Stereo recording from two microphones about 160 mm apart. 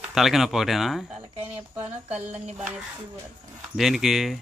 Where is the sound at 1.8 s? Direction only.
10° right (ahead or behind).